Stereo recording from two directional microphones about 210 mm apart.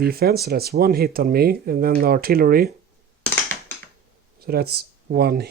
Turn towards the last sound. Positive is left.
turn(degrees=-50)  # may be behind; listen again after turning